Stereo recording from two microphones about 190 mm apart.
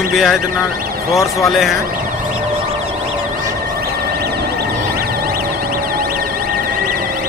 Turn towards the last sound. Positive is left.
turn(degrees=-50)  # may be behind; listen again after turning